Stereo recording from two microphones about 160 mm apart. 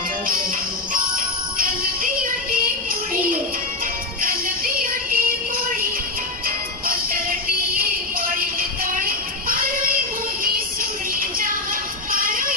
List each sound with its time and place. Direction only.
1.1 s music: 60° right (ahead or behind)
4.2 s music: 60° right (ahead or behind)
6.8 s music: 65° right (ahead or behind)
8.5 s child singing: 60° right (ahead or behind)
11.1 s music: 60° right (ahead or behind)